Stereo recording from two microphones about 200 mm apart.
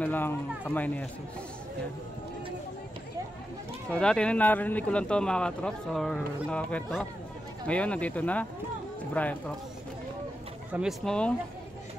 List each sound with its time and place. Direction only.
0.0 s speech: 10° left (ahead or behind)
3.9 s speech: 5° left (ahead or behind)
10.7 s speech: centre (ahead or behind)